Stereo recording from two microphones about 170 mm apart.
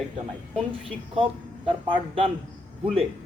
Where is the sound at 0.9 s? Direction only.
30° right (ahead or behind).